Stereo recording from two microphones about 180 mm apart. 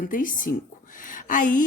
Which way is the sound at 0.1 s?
50° left (ahead or behind).